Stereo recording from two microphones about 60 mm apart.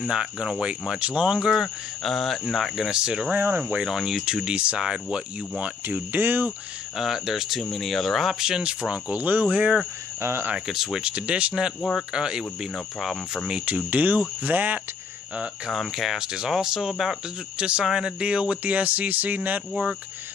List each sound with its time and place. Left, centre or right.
0.0 s speech: centre
2.0 s cricket: centre
3.0 s speech: centre
3.3 s speech: right
3.8 s speech: centre
5.9 s speech: right
7.0 s speech: centre; by 9.8 s right
10.2 s speech: right
10.5 s speech: centre
12.7 s cricket: centre
13.5 s speech: right
15.7 s cricket: centre
16.2 s speech: centre; by 19.6 s right